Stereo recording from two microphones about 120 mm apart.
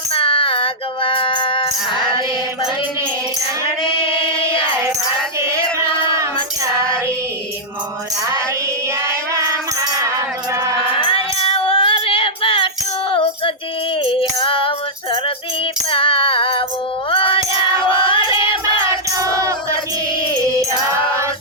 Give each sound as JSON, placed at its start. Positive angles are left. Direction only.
{"t": 0.1, "sound": "music", "side_deg": 50}
{"t": 10.0, "sound": "music", "side_deg": -25}
{"t": 11.0, "sound": "child singing", "side_deg": 50}
{"t": 14.0, "sound": "female singing", "side_deg": 50}
{"t": 15.9, "sound": "female singing", "side_deg": 50}
{"t": 17.1, "sound": "music", "side_deg": 45}
{"t": 18.6, "sound": "music", "side_deg": -30}
{"t": 20.6, "sound": "music", "side_deg": -25}